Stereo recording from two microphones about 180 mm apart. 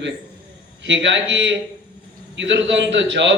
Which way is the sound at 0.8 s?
90° right.